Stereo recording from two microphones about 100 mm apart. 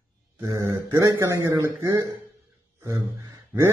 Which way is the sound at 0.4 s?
30° right (ahead or behind).